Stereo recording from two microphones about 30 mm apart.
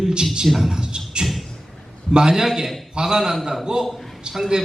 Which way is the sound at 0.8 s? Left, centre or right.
Right.